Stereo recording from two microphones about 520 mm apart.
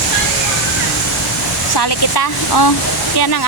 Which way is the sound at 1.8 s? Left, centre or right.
Left.